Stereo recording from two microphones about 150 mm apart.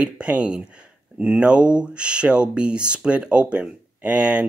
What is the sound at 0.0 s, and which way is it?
Speech, 10° right (ahead or behind).